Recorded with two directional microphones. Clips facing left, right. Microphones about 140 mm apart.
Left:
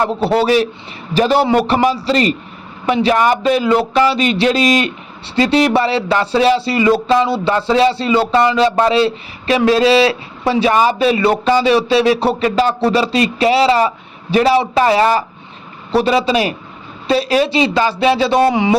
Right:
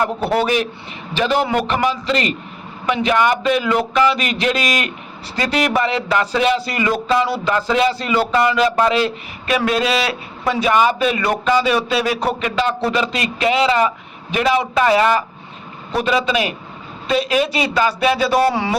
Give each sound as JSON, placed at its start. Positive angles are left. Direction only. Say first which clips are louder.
{"t": 0.0, "sound": "speech", "louder": "left 3 dB", "side_deg": 30}